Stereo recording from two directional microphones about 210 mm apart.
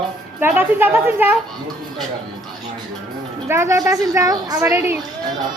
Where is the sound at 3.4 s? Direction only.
15° right (ahead or behind).